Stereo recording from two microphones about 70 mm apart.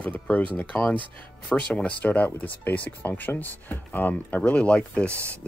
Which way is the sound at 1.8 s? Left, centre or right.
Centre.